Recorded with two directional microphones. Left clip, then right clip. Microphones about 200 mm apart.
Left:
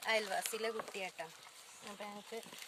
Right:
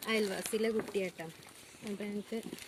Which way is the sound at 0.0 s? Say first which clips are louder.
Right 2 dB; 15° left (ahead or behind).